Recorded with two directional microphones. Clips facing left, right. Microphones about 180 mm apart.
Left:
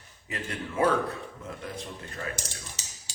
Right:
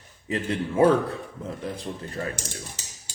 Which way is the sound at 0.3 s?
30° right (ahead or behind).